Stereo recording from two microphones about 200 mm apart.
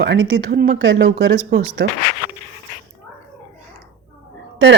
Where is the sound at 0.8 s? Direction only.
60° right (ahead or behind).